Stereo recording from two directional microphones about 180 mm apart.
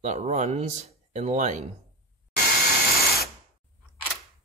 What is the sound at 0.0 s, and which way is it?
Speech, 40° right (ahead or behind).